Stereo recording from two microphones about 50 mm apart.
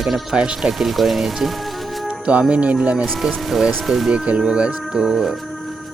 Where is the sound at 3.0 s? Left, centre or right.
Centre.